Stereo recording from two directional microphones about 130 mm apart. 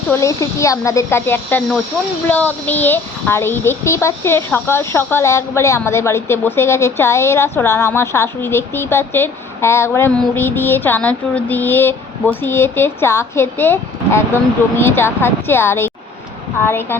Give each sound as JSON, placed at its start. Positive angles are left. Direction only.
{"t": 0.1, "sound": "a child's voice", "side_deg": 25}